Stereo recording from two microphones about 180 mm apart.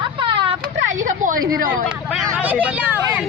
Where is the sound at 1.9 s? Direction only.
5° right (ahead or behind).